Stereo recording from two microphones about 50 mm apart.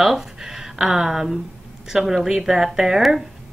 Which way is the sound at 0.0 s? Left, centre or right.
Centre.